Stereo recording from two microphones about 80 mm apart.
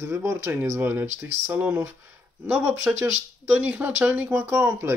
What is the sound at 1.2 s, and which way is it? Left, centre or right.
Speech, right.